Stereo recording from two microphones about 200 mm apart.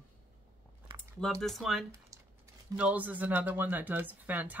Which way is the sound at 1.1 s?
5° left (ahead or behind).